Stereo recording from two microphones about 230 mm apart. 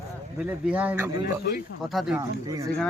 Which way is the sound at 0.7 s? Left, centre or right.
Centre.